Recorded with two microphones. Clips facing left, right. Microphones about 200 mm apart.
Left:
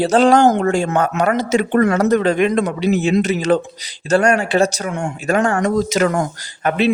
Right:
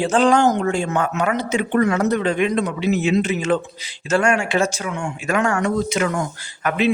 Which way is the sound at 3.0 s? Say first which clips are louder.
Left 3 dB; 40° left (ahead or behind).